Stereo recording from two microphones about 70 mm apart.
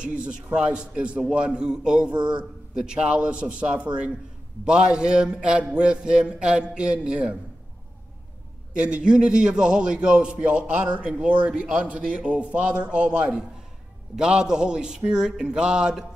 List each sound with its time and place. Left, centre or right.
0.0 s a man's voice: centre
8.8 s a man's voice: centre